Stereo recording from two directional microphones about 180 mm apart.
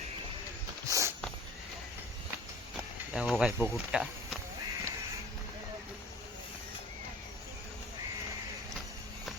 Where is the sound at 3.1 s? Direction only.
5° right (ahead or behind).